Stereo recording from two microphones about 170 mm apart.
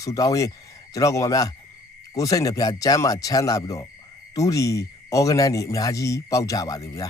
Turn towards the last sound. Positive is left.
turn(degrees=20)  # may be behind; listen again after turning